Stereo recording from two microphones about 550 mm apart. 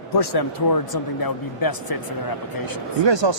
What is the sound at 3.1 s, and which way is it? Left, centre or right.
Speech, right.